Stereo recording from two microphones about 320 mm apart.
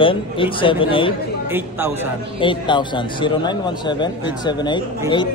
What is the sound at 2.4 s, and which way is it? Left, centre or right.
Speech, centre.